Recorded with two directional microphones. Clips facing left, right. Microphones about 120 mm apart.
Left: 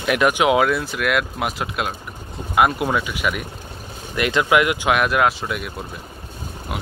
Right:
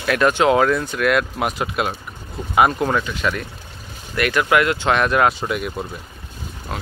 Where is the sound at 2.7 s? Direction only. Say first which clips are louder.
Right 1 dB; 10° left (ahead or behind).